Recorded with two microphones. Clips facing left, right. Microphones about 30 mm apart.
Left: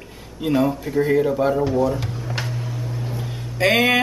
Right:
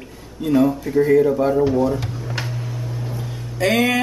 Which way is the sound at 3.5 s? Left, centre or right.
Left.